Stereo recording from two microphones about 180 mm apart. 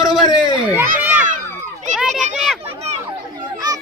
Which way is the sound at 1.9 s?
45° right (ahead or behind).